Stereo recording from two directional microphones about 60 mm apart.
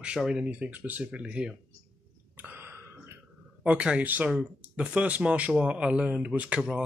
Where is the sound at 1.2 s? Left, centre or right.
Centre.